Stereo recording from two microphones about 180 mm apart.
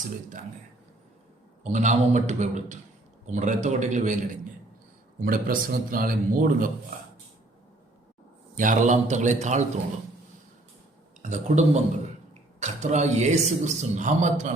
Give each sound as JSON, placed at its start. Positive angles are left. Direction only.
{"t": 1.6, "sound": "a man's voice", "side_deg": -40}
{"t": 5.2, "sound": "a man's voice", "side_deg": -50}
{"t": 8.5, "sound": "a man's voice", "side_deg": -45}
{"t": 11.2, "sound": "a man's voice", "side_deg": -45}